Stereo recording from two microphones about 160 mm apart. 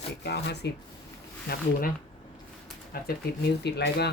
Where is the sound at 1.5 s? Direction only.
75° left (ahead or behind).